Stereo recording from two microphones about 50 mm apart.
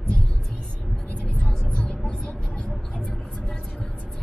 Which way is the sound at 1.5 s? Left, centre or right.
Centre.